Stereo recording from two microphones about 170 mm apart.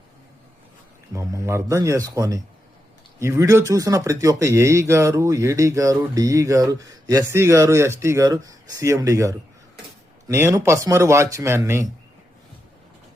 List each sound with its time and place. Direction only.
1.1 s a man's voice: 20° right (ahead or behind)